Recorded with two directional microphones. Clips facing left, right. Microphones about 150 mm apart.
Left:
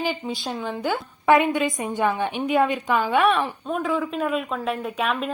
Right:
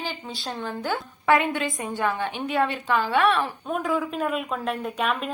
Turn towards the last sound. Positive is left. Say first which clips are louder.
# left 1 dB
turn(degrees=0)  # may be behind; listen again after turning